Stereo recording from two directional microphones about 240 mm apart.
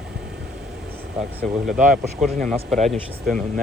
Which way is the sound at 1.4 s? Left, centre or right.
Centre.